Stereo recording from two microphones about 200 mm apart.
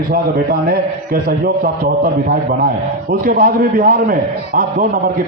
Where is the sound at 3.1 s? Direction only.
45° right (ahead or behind).